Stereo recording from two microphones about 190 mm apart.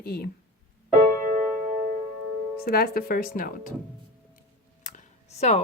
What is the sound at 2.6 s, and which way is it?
Speech, 55° left (ahead or behind).